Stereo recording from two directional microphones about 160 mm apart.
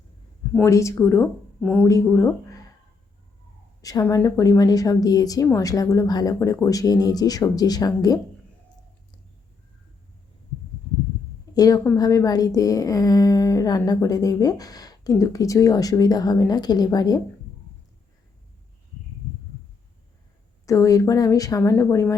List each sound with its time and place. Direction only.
0.6 s speech: 20° left (ahead or behind)
1.9 s speech: 20° left (ahead or behind)
3.8 s a woman's voice: 20° left (ahead or behind)
11.5 s a woman's voice: 20° left (ahead or behind)
20.7 s a woman's voice: 20° left (ahead or behind)